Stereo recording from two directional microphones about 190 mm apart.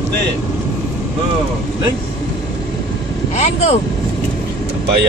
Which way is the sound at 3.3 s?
35° left (ahead or behind).